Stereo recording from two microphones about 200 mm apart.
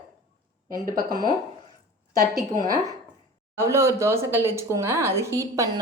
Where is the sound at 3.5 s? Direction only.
15° right (ahead or behind).